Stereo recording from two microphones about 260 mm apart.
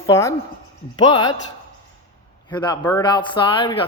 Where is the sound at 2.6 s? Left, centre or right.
Centre.